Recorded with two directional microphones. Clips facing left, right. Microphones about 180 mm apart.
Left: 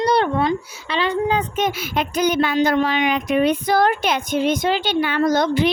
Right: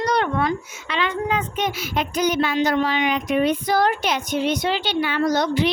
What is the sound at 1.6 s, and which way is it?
Speech, 55° left (ahead or behind).